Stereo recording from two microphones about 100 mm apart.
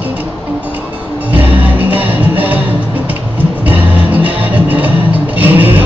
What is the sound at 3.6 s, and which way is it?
Music, 15° right (ahead or behind).